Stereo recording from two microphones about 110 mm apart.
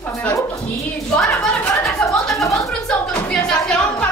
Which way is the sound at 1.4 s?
5° left (ahead or behind).